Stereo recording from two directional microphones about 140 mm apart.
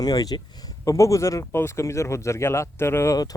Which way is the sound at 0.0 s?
25° left (ahead or behind).